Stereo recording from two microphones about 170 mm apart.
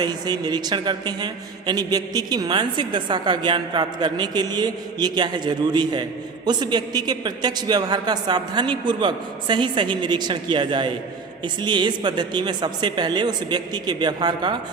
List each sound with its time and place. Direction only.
0.0 s a man's voice: 25° right (ahead or behind)